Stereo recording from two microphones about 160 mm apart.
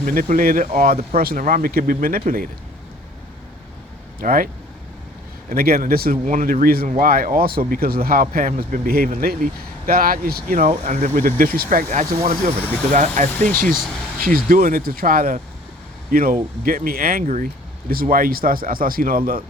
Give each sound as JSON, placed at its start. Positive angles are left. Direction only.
{"t": 0.0, "sound": "speech", "side_deg": -60}
{"t": 4.2, "sound": "speech", "side_deg": -60}
{"t": 5.5, "sound": "speech", "side_deg": -65}